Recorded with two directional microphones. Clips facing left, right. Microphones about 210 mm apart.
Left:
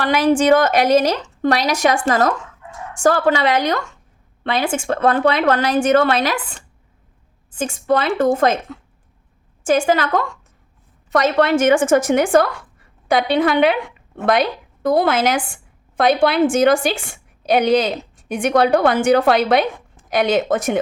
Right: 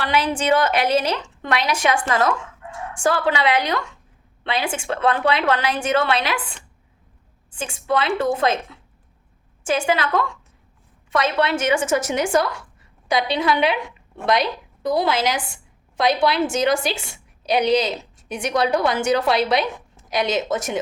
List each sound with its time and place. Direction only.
0.0 s a woman's voice: 45° left (ahead or behind)